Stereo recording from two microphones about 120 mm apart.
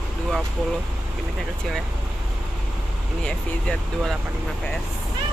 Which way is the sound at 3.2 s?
5° left (ahead or behind).